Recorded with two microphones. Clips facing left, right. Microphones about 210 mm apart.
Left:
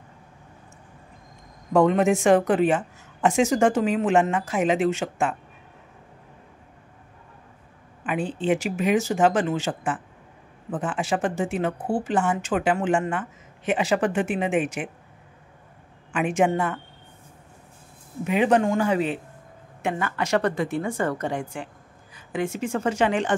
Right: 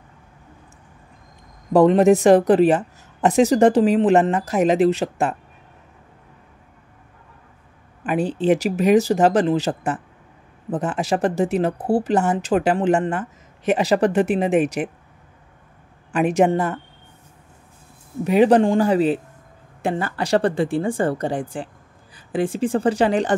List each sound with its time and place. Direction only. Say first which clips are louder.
1.7 s speech: right 6 dB; 35° right (ahead or behind)
8.0 s speech: right 6 dB; 40° right (ahead or behind)
16.1 s speech: right 5 dB; 40° right (ahead or behind)
18.2 s speech: right 6 dB; 35° right (ahead or behind)